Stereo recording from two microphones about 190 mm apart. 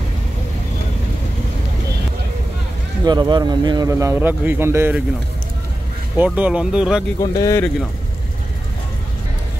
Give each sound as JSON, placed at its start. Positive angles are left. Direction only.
{"t": 3.1, "sound": "speech", "side_deg": -25}
{"t": 6.1, "sound": "speech", "side_deg": -10}
{"t": 7.2, "sound": "speech", "side_deg": 15}